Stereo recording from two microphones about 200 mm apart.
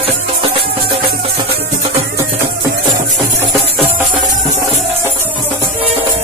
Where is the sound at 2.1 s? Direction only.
15° right (ahead or behind).